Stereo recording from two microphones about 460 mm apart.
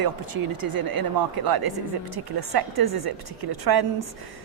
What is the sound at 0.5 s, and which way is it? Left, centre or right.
A woman's voice, right.